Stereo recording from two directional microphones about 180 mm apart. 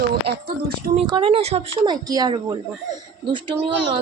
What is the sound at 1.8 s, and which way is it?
Speech, 25° right (ahead or behind).